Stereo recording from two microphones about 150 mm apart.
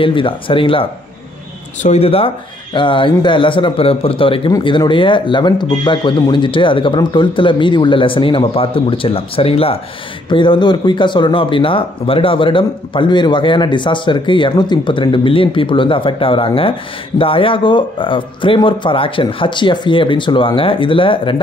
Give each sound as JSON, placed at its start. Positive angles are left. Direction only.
{"t": 0.0, "sound": "speech", "side_deg": 35}